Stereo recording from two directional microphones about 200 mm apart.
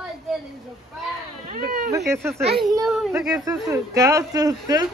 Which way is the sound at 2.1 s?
15° right (ahead or behind).